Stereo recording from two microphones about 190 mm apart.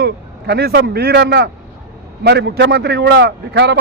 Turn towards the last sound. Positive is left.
turn(degrees=-65)  # may be behind; listen again after turning